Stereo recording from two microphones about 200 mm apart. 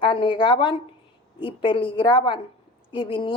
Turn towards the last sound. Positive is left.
turn(degrees=25)  # may be behind; listen again after turning